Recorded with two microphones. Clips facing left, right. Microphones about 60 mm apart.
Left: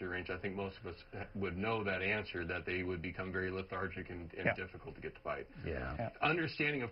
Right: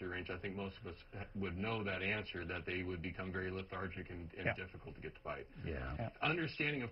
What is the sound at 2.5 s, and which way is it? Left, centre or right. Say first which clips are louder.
Speech: left 2 dB; left.